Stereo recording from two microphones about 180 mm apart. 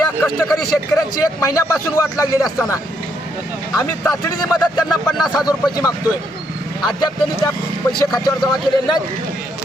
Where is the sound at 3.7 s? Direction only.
20° left (ahead or behind).